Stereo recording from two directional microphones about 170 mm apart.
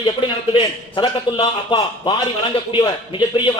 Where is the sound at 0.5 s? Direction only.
30° left (ahead or behind).